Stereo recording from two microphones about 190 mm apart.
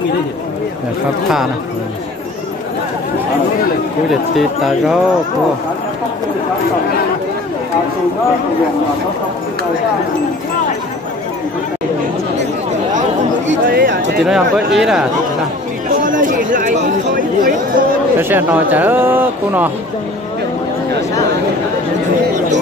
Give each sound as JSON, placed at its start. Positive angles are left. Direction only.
{"t": 4.4, "sound": "speech", "side_deg": 0}
{"t": 13.7, "sound": "a sound", "side_deg": -50}
{"t": 14.2, "sound": "speech", "side_deg": -5}
{"t": 16.0, "sound": "chatter", "side_deg": -45}
{"t": 18.1, "sound": "speech", "side_deg": -10}